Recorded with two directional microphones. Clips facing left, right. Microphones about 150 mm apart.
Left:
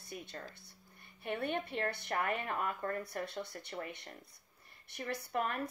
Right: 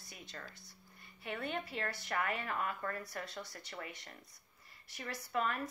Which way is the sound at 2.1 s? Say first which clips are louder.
Left 1 dB; 35° left (ahead or behind).